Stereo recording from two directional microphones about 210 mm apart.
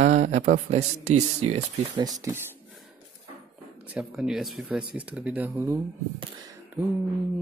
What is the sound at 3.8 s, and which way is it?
Speech, 5° right (ahead or behind).